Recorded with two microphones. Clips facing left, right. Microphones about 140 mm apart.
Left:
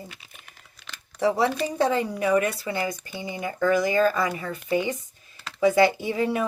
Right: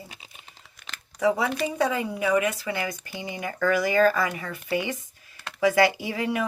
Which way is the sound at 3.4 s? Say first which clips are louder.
Left 2 dB; 20° left (ahead or behind).